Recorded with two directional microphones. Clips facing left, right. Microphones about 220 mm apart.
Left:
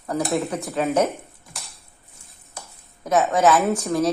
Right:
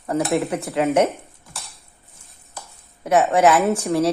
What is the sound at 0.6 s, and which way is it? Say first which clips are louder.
Speech: right 3 dB; 30° right (ahead or behind).